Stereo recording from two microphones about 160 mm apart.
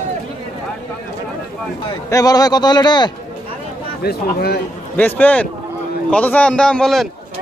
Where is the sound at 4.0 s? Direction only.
75° left (ahead or behind).